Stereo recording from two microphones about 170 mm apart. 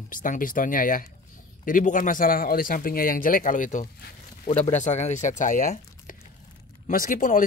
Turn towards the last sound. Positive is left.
turn(degrees=50)  # may be behind; listen again after turning